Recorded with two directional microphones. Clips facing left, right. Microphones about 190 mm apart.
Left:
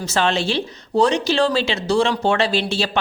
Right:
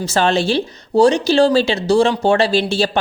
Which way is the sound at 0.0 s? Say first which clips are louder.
Right 4 dB; 35° right (ahead or behind).